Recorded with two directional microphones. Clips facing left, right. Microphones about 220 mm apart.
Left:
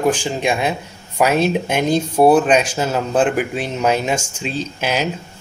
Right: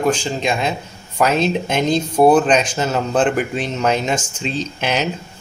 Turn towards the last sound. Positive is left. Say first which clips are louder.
# even
turn(degrees=5)  # may be behind; listen again after turning